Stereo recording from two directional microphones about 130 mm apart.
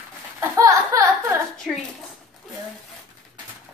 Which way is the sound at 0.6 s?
25° right (ahead or behind).